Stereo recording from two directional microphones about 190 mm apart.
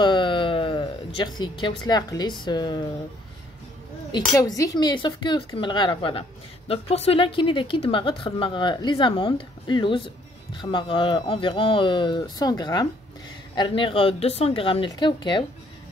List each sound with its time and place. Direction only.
0.0 s a sound: 25° left (ahead or behind)
2.4 s speech: 20° left (ahead or behind)
4.4 s speech: 20° left (ahead or behind)